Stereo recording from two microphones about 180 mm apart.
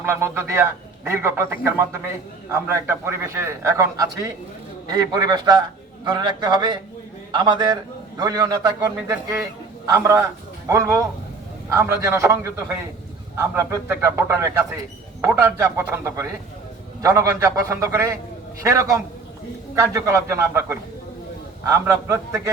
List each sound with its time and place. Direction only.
0.0 s a man's voice: 15° right (ahead or behind)